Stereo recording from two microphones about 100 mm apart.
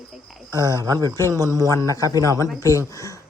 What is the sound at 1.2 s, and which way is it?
Speech, 35° right (ahead or behind).